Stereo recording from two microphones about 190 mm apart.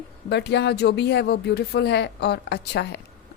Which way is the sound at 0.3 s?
65° left (ahead or behind).